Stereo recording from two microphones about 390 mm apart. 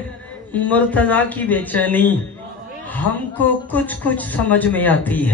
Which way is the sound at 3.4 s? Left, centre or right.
Centre.